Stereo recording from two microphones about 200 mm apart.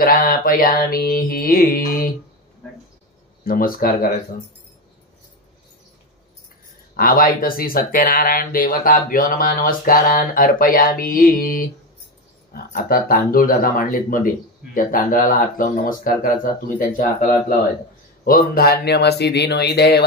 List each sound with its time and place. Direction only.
0.0 s speech: 45° left (ahead or behind)
3.4 s speech: 45° left (ahead or behind)
7.0 s speech: 45° left (ahead or behind)